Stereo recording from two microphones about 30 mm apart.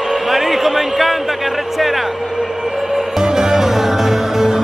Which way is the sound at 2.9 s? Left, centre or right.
Centre.